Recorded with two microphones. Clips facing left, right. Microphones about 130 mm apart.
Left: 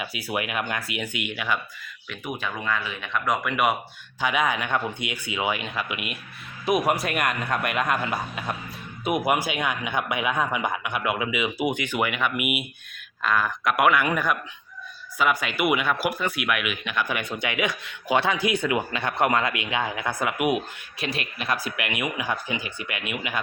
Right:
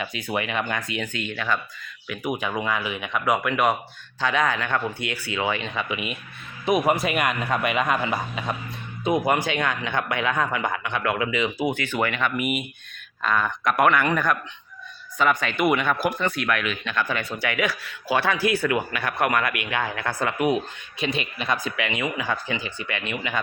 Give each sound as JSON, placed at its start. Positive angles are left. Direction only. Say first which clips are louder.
{"t": 0.0, "sound": "a man's voice", "louder": "right 2 dB", "side_deg": 10}
{"t": 2.0, "sound": "speech", "louder": "right 4 dB", "side_deg": -10}
{"t": 4.2, "sound": "a man's voice", "louder": "right 1 dB", "side_deg": 15}